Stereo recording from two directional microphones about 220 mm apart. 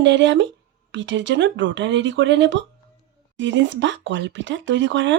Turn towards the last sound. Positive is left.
turn(degrees=-55)  # may be behind; listen again after turning